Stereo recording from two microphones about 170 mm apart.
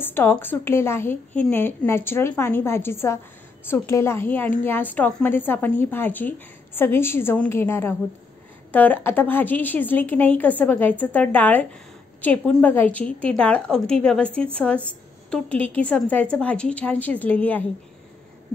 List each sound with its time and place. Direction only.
0.0 s a woman's voice: 15° left (ahead or behind)